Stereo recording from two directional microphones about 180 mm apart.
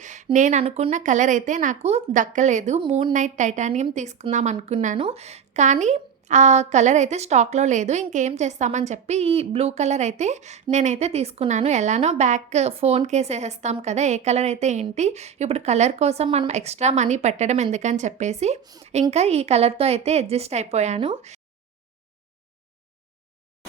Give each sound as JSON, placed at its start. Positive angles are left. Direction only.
{"t": 0.0, "sound": "a sound", "side_deg": -40}
{"t": 0.3, "sound": "a woman's voice", "side_deg": -45}
{"t": 2.8, "sound": "a woman's voice", "side_deg": -30}
{"t": 3.1, "sound": "a woman's voice", "side_deg": -45}